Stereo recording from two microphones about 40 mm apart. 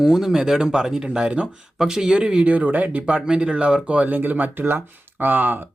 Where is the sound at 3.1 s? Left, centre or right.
Right.